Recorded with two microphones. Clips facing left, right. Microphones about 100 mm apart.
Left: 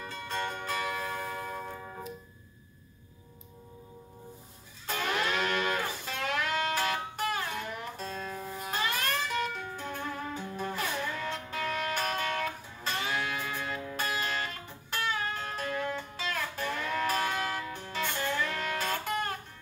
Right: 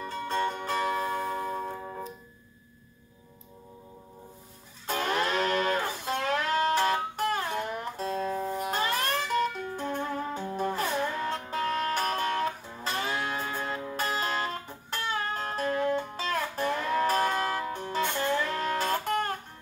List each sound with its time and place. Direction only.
0.0 s music: 35° right (ahead or behind)
4.8 s music: 40° right (ahead or behind)